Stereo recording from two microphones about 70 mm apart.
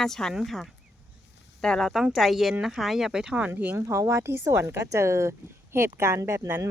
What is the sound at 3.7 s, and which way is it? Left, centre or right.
Speech, right.